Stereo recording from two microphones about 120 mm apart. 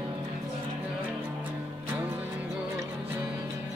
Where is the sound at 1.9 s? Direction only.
15° right (ahead or behind).